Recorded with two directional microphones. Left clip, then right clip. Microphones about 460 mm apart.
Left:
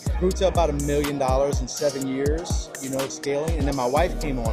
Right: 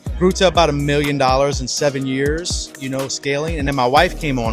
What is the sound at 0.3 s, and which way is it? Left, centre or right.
Speech, right.